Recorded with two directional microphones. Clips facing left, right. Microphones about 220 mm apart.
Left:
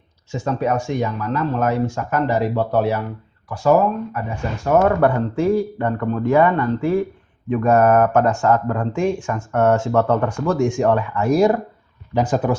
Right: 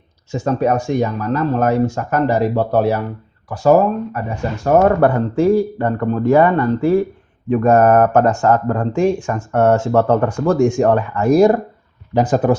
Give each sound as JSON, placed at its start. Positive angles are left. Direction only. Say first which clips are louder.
{"t": 0.3, "sound": "speech", "louder": "right 4 dB", "side_deg": -40}